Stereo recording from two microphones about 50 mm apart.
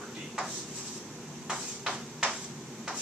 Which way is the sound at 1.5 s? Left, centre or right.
Centre.